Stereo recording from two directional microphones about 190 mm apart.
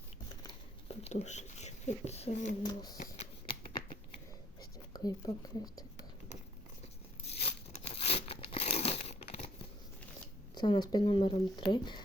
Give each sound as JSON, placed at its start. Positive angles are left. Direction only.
{"t": 0.9, "sound": "speech", "side_deg": 35}
{"t": 2.6, "sound": "speech", "side_deg": 20}
{"t": 4.9, "sound": "speech", "side_deg": 20}
{"t": 7.3, "sound": "a sound", "side_deg": 30}
{"t": 7.9, "sound": "crumpling", "side_deg": 30}
{"t": 10.5, "sound": "speech", "side_deg": 20}